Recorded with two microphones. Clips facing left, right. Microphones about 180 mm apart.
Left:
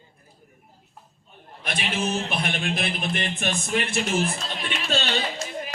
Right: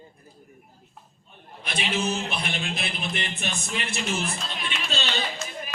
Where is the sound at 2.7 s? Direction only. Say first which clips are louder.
Left 4 dB; 50° left (ahead or behind).